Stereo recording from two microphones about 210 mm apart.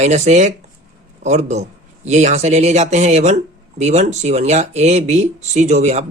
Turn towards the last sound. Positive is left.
turn(degrees=-30)  # may be behind; listen again after turning